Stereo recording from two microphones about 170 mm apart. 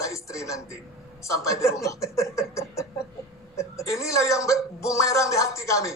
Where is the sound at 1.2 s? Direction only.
20° left (ahead or behind).